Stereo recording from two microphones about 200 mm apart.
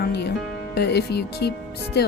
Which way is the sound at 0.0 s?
55° left (ahead or behind).